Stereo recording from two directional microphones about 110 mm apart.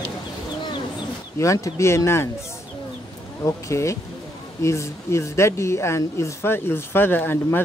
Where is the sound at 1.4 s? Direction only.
30° left (ahead or behind).